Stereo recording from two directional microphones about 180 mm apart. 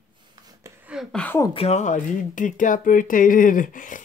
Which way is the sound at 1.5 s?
40° left (ahead or behind).